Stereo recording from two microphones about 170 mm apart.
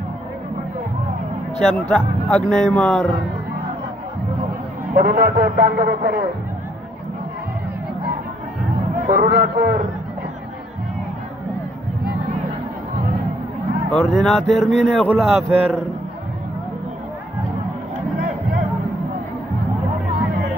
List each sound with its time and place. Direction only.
1.6 s a man's voice: 5° left (ahead or behind)
5.0 s a man's voice: 70° right (ahead or behind)
9.0 s speech: 65° right (ahead or behind)
13.8 s a man's voice: centre (ahead or behind)